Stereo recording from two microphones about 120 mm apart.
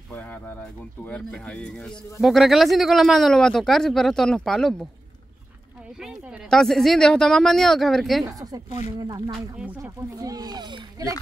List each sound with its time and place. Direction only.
0.1 s speech: 10° left (ahead or behind)
5.9 s speech: centre (ahead or behind)
8.4 s speech: 30° right (ahead or behind)